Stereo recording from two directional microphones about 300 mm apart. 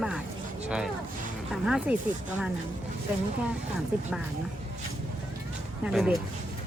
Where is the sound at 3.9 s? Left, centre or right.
Centre.